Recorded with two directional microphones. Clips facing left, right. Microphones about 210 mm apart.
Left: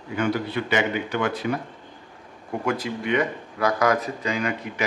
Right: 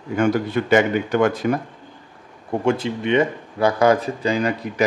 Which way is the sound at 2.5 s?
25° right (ahead or behind).